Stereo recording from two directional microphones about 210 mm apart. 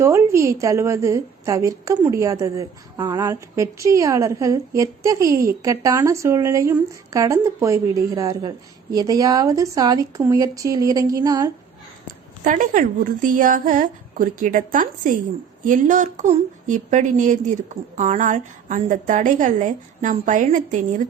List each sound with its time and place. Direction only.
0.0 s a woman's voice: 15° right (ahead or behind)
12.5 s speech: 40° right (ahead or behind)